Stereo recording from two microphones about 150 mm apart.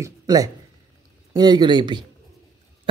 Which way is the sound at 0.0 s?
25° right (ahead or behind).